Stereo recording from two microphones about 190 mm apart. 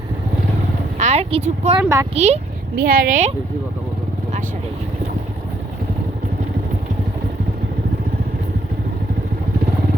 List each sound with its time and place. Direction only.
0.9 s a woman's voice: 35° right (ahead or behind)
1.8 s speech: 15° right (ahead or behind)
2.1 s speech: 35° right (ahead or behind)
2.7 s speech: 50° right (ahead or behind)